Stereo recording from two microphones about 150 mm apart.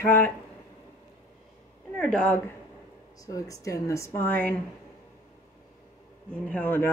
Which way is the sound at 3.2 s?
20° left (ahead or behind).